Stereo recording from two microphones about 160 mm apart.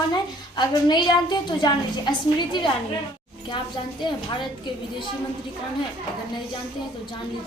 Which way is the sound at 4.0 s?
30° left (ahead or behind).